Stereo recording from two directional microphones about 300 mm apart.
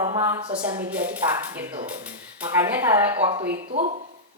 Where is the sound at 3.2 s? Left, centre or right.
Centre.